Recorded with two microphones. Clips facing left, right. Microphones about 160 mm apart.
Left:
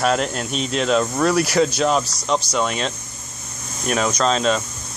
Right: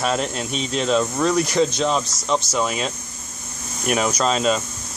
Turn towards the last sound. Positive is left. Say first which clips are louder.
# left 1 dB
turn(degrees=-5)  # may be behind; listen again after turning